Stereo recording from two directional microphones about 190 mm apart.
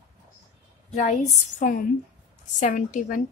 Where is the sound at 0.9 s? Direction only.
40° left (ahead or behind).